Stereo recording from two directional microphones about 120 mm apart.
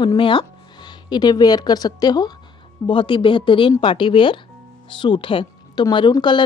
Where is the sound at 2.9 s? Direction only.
45° left (ahead or behind).